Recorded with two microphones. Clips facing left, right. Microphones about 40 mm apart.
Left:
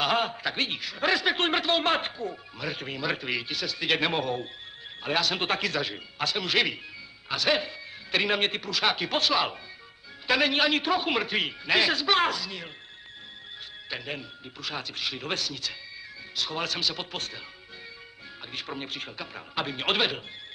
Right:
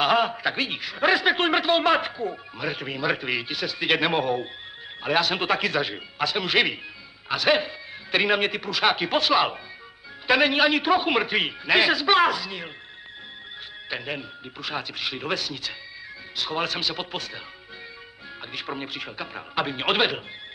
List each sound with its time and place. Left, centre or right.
0.0 s a man's voice: centre
13.8 s a man's voice: centre
18.5 s a man's voice: centre